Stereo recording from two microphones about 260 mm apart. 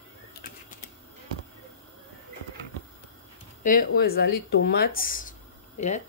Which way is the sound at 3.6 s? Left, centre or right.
Left.